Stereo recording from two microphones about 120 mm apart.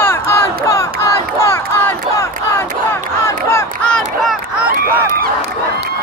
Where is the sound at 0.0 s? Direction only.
20° left (ahead or behind).